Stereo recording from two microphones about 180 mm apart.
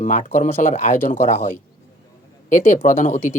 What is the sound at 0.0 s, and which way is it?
Speech, 40° left (ahead or behind).